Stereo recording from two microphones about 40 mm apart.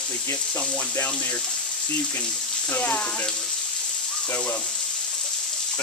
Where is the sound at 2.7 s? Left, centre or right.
Left.